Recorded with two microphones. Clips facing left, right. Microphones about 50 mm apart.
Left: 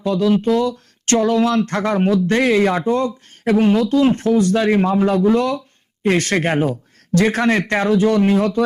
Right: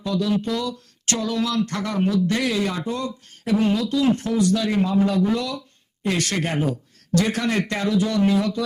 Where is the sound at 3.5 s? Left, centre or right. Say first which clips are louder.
Left 6 dB; left.